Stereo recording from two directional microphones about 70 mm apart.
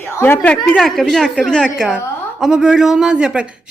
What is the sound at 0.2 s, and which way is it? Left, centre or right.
Speech, left.